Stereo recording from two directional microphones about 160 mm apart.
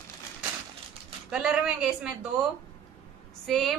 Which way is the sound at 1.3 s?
5° right (ahead or behind).